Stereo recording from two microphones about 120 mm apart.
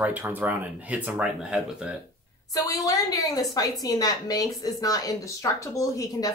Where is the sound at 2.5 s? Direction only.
30° left (ahead or behind).